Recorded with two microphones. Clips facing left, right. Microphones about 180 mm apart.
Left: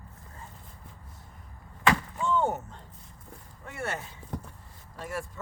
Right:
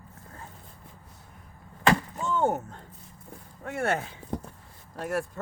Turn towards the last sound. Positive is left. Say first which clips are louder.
# right 6 dB
turn(degrees=-65)  # may be behind; listen again after turning